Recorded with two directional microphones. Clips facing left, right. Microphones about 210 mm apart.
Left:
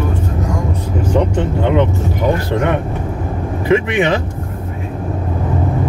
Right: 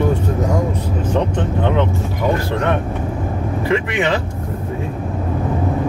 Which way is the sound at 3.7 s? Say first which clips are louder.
Left 5 dB; 15° left (ahead or behind).